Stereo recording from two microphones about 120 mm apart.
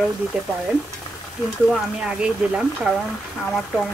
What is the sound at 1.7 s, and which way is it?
Speech, 5° right (ahead or behind).